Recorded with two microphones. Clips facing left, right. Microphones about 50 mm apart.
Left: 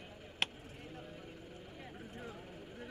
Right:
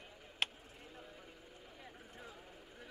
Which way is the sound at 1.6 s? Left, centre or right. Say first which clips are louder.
Left 5 dB; centre.